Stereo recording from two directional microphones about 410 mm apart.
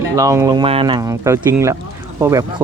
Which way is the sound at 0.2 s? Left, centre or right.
Centre.